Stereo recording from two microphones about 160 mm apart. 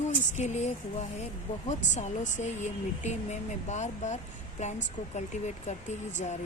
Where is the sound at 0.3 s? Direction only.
45° left (ahead or behind).